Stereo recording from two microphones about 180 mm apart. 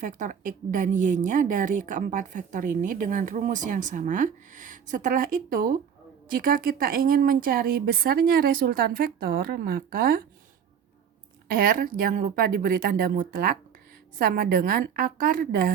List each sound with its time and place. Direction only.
0.0 s a woman's voice: 45° right (ahead or behind)
11.5 s a woman's voice: 55° right (ahead or behind)